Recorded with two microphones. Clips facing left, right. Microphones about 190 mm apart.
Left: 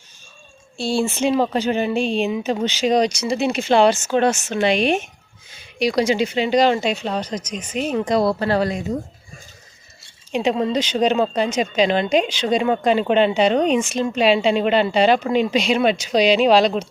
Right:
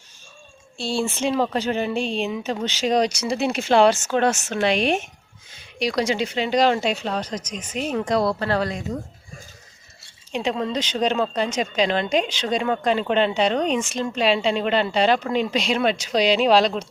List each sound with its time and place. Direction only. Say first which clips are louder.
0.8 s speech: left 4 dB; 5° left (ahead or behind)
10.3 s speech: left 5 dB; 15° left (ahead or behind)